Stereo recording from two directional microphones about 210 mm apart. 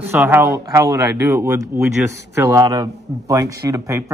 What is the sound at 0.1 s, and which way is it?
A man's voice, 10° right (ahead or behind).